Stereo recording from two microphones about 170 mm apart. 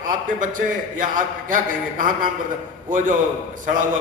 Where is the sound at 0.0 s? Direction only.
50° right (ahead or behind).